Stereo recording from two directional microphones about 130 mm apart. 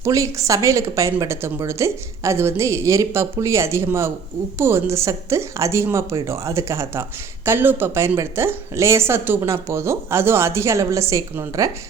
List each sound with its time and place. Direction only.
0.0 s speech: 25° right (ahead or behind)